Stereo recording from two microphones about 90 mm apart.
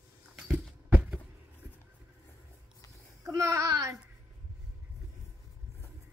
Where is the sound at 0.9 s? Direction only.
15° right (ahead or behind).